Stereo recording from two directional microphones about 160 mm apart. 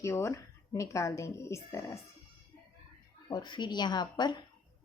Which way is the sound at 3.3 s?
30° left (ahead or behind).